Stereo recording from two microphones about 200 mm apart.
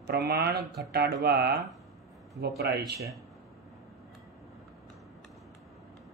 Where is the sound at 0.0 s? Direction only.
55° right (ahead or behind).